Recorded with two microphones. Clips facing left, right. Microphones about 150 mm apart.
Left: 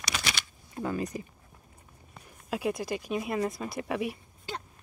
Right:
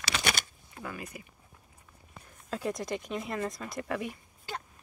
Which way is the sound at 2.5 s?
10° left (ahead or behind).